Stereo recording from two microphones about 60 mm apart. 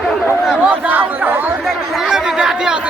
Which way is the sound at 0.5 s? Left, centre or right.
Centre.